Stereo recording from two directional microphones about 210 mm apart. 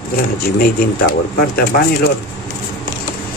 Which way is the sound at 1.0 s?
45° left (ahead or behind).